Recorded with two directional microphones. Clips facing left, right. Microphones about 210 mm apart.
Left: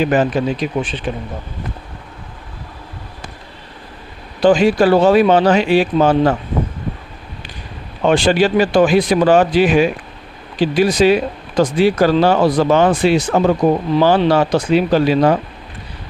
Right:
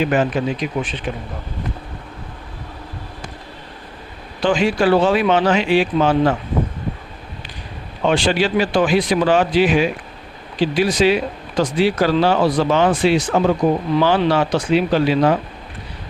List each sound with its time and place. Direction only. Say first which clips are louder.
0.0 s speech: left 3 dB; 35° left (ahead or behind)
4.4 s speech: left 5 dB; 40° left (ahead or behind)
8.0 s speech: left 4 dB; 50° left (ahead or behind)